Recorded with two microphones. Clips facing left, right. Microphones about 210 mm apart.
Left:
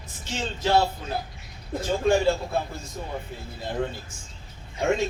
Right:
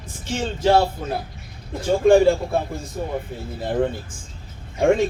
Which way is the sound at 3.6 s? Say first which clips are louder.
Right 7 dB; 55° right (ahead or behind).